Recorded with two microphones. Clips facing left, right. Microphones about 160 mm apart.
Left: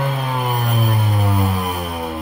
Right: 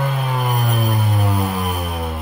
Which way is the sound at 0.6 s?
Centre (ahead or behind).